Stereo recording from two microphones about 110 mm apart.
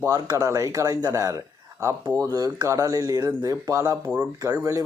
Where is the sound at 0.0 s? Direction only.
30° right (ahead or behind).